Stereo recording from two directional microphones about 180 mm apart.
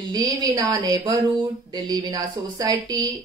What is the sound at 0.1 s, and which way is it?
A woman's voice, 20° right (ahead or behind).